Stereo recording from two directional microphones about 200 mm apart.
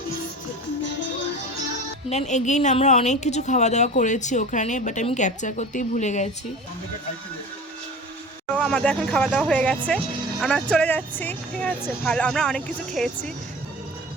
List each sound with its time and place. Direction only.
2.0 s speech: 35° left (ahead or behind)
8.5 s a woman's voice: 5° left (ahead or behind)